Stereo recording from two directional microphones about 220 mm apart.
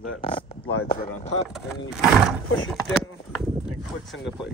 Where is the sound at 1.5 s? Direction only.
Centre (ahead or behind).